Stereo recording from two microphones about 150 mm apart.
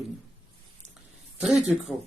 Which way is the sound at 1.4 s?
5° right (ahead or behind).